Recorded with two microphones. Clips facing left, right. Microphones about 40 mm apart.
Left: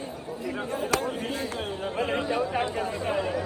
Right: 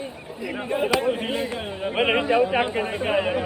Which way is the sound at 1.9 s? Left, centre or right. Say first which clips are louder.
Right 8 dB; right.